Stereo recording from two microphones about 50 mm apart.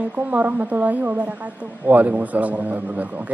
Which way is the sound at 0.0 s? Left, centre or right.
Right.